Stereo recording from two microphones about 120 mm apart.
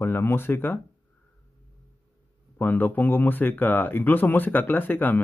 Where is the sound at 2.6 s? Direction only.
15° left (ahead or behind).